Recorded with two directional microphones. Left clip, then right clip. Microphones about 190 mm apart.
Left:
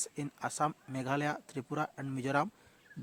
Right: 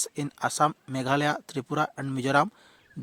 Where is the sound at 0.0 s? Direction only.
45° right (ahead or behind).